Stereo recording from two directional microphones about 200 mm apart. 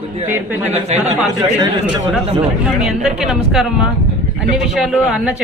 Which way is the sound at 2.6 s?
5° right (ahead or behind).